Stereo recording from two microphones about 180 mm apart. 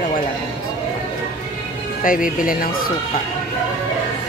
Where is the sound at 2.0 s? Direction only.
50° left (ahead or behind).